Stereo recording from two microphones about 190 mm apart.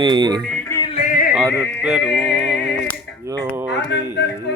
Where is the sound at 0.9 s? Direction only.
45° left (ahead or behind).